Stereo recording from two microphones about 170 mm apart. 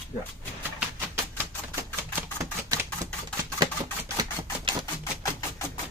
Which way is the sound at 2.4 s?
15° right (ahead or behind).